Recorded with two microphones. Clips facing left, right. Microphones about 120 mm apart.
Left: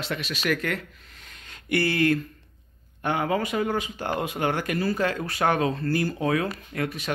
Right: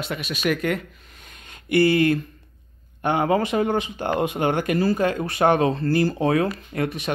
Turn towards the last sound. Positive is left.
turn(degrees=-30)  # may be behind; listen again after turning